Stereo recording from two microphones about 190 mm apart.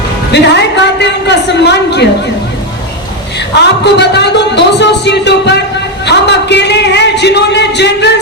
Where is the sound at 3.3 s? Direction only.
65° left (ahead or behind).